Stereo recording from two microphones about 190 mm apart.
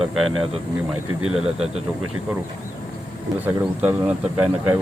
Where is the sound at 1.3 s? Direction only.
35° right (ahead or behind).